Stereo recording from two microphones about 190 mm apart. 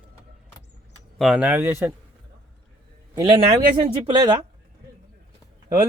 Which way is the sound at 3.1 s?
25° right (ahead or behind).